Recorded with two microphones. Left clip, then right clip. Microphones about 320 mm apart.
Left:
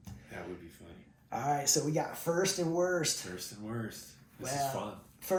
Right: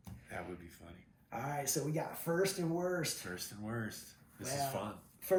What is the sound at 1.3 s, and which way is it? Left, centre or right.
Speech, centre.